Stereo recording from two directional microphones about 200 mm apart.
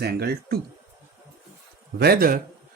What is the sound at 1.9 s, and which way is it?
Speech, 50° right (ahead or behind).